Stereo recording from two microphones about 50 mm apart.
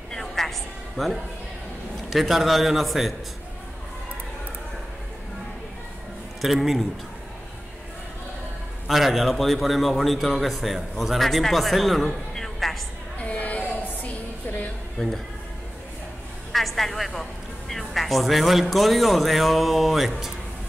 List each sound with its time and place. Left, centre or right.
0.1 s music: centre
2.0 s a man's voice: centre
6.4 s a man's voice: centre
8.8 s a man's voice: centre
13.2 s a sound: left
15.0 s speech: centre
16.5 s a woman's voice: centre